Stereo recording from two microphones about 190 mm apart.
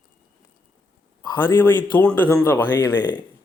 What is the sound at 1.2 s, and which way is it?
Speech, 25° left (ahead or behind).